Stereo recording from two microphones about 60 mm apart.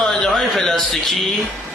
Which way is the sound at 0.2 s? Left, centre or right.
Centre.